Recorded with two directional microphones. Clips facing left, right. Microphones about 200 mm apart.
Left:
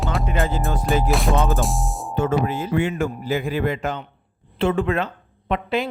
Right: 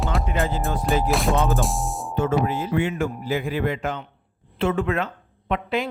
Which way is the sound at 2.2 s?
50° left (ahead or behind).